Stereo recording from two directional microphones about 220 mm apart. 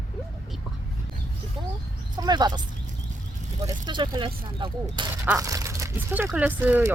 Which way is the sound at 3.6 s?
20° right (ahead or behind).